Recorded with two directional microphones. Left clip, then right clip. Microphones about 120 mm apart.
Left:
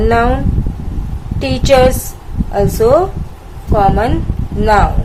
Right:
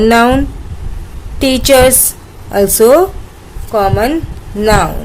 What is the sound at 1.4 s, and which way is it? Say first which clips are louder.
A woman's voice: right 2 dB; 55° right (ahead or behind).